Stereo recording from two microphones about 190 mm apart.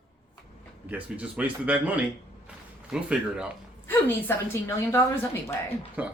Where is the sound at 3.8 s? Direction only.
10° left (ahead or behind).